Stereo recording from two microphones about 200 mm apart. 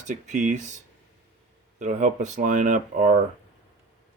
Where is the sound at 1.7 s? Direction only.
40° right (ahead or behind).